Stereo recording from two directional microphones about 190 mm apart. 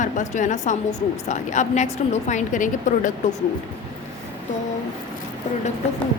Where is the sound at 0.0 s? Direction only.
40° left (ahead or behind).